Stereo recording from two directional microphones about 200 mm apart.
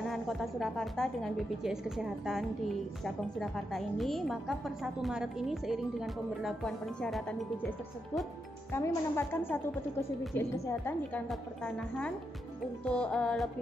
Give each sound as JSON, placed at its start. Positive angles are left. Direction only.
{"t": 0.1, "sound": "a woman's voice", "side_deg": 0}
{"t": 8.7, "sound": "a woman's voice", "side_deg": 10}